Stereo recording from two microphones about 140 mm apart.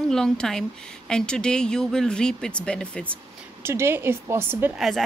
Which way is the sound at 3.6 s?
15° right (ahead or behind).